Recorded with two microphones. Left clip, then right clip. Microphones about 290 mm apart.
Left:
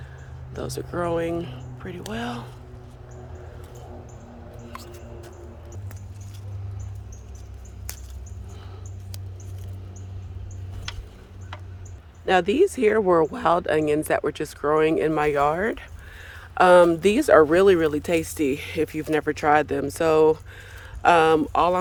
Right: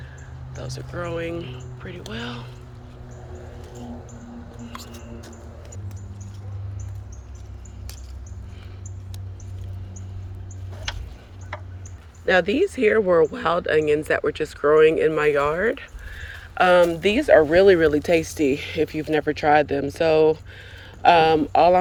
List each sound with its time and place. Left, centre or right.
0.5 s speech: left
12.2 s speech: centre